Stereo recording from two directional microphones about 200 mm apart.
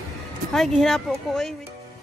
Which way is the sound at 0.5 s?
Centre (ahead or behind).